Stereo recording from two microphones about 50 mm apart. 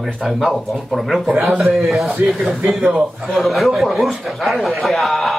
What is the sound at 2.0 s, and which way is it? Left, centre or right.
Speech, centre.